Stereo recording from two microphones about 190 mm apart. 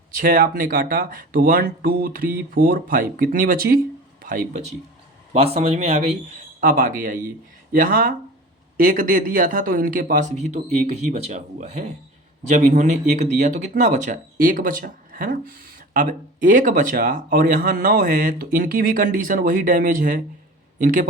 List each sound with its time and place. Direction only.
0.2 s speech: 45° right (ahead or behind)